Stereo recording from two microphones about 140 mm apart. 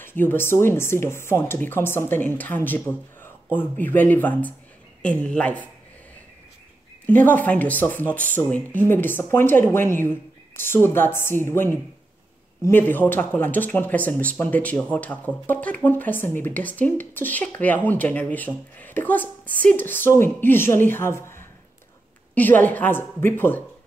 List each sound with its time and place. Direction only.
0.0 s speech: 15° left (ahead or behind)
7.1 s speech: 10° left (ahead or behind)
18.8 s a sound: 10° left (ahead or behind)
19.6 s speech: 10° left (ahead or behind)